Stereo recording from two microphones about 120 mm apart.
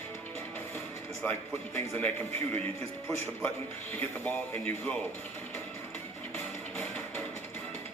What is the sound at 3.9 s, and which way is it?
A man's voice, 15° left (ahead or behind).